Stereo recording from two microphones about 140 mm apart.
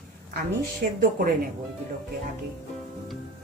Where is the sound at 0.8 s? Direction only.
90° right.